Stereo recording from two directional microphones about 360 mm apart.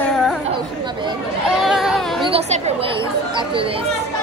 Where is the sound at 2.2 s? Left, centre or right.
Centre.